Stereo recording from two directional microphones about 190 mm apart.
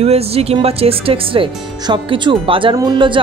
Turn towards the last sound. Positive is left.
turn(degrees=-25)  # may be behind; listen again after turning